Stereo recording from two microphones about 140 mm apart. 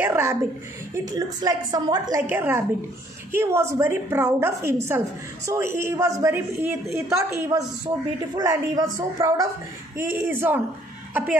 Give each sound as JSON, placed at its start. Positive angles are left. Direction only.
{"t": 0.0, "sound": "a sound", "side_deg": -20}
{"t": 0.9, "sound": "a woman's voice", "side_deg": -25}
{"t": 2.2, "sound": "a woman's voice", "side_deg": -15}